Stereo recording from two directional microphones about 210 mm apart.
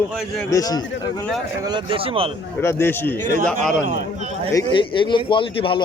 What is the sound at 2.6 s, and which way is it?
Speech, 10° left (ahead or behind).